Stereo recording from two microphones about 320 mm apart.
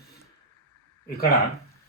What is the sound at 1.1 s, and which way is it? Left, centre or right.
Speech, left.